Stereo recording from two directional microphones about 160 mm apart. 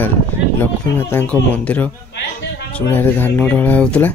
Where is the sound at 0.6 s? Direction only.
15° left (ahead or behind).